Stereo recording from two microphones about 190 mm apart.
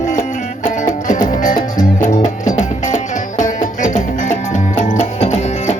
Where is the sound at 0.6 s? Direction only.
45° left (ahead or behind).